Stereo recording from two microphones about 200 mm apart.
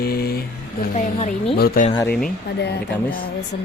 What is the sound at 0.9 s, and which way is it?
Speech, 35° left (ahead or behind).